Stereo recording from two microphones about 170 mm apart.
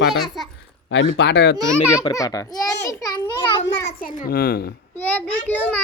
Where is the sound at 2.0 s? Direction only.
20° left (ahead or behind).